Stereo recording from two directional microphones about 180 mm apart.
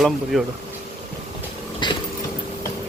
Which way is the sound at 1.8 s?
25° left (ahead or behind).